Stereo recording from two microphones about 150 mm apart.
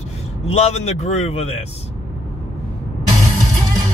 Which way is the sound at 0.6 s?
45° left (ahead or behind).